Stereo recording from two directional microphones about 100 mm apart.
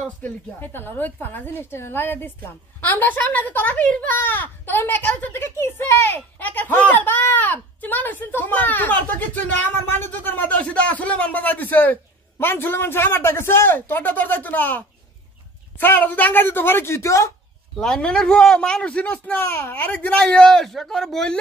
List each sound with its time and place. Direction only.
0.2 s a woman's voice: 20° left (ahead or behind)
17.7 s a man's voice: 5° left (ahead or behind)